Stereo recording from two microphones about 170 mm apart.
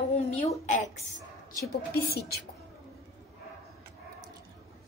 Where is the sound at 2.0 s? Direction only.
65° left (ahead or behind).